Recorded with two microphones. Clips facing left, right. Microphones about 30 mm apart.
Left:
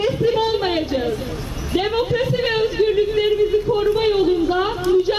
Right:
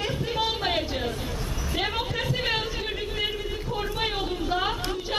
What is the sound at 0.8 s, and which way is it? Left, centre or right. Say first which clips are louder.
Speech: left 7 dB; centre.